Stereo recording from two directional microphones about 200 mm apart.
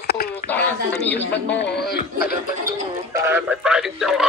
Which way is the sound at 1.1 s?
5° left (ahead or behind).